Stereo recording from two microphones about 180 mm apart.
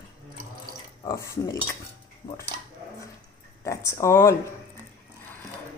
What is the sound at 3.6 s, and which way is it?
Speech, 15° left (ahead or behind).